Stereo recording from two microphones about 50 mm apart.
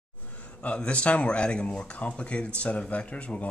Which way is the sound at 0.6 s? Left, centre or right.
Left.